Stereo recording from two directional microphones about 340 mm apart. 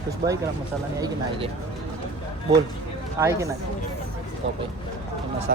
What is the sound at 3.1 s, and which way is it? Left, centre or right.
Speech, centre.